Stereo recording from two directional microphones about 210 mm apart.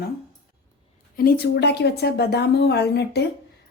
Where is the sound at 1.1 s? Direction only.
50° left (ahead or behind).